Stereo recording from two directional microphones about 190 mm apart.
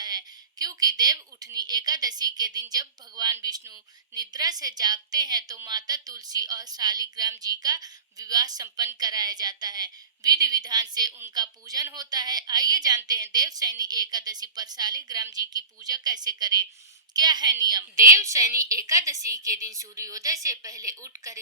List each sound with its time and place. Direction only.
0.0 s a woman's voice: 20° right (ahead or behind)